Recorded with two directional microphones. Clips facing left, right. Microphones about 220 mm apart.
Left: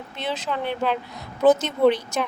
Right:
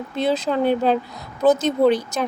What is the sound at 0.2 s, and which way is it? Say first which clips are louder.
A woman's voice: right 8 dB; 35° right (ahead or behind).